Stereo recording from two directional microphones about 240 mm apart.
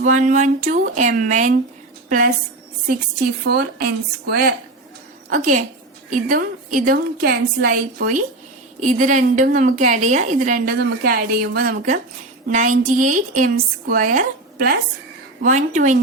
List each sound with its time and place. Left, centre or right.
0.0 s a woman's voice: right
3.4 s a woman's voice: right